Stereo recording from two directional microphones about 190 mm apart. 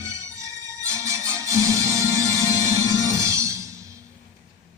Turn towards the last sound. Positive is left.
turn(degrees=-15)  # may be behind; listen again after turning